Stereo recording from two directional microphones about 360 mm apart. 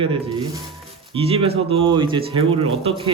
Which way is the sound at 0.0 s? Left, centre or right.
Centre.